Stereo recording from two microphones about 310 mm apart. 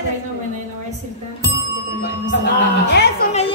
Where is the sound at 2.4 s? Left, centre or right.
Left.